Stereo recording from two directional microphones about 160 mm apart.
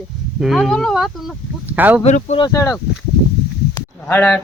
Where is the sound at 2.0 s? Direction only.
45° left (ahead or behind).